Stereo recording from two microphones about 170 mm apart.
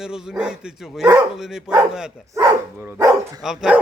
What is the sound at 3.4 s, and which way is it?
Speech, 5° right (ahead or behind).